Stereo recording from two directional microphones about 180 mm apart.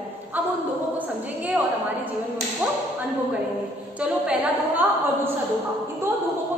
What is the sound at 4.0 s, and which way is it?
A woman's voice, 10° right (ahead or behind).